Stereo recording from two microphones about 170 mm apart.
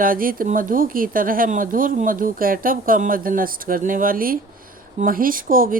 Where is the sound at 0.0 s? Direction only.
55° right (ahead or behind).